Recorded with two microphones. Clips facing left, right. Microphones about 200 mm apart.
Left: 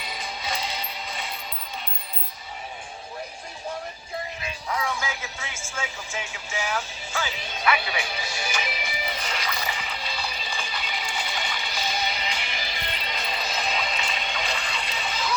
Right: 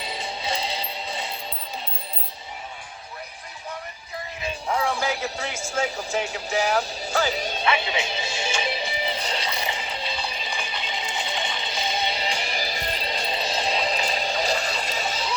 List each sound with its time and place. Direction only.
0.0 s music: 30° right (ahead or behind)
4.7 s speech: 30° right (ahead or behind)
7.6 s music: 25° right (ahead or behind)